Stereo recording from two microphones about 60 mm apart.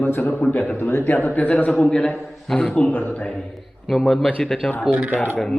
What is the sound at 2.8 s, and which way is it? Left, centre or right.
Speech, left.